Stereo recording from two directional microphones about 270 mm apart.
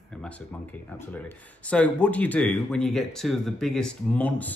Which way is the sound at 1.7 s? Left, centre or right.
Centre.